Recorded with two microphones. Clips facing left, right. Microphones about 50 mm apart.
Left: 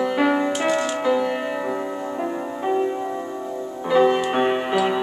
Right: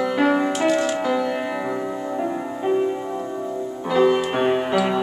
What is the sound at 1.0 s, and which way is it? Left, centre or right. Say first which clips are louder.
Music: left 1 dB; centre.